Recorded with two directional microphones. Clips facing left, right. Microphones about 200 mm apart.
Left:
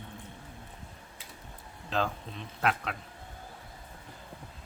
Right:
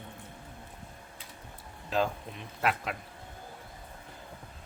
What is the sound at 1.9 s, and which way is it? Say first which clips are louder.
Speech: right 2 dB; 10° right (ahead or behind).